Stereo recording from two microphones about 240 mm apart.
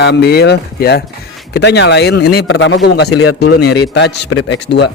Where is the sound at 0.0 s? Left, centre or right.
Left.